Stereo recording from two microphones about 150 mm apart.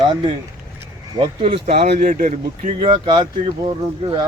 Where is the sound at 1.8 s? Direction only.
75° right (ahead or behind).